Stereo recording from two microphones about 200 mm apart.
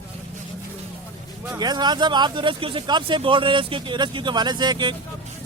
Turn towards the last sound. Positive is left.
turn(degrees=-20)  # may be behind; listen again after turning